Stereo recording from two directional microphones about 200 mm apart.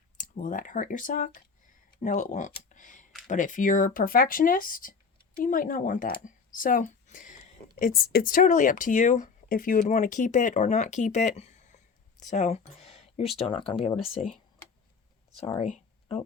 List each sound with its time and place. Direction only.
0.2 s speech: 40° left (ahead or behind)
15.4 s speech: 30° left (ahead or behind)